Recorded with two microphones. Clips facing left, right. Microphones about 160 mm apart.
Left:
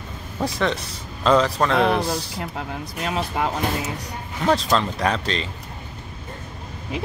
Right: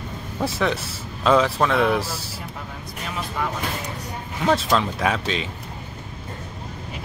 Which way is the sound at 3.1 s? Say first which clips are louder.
Left 4 dB; 75° left (ahead or behind).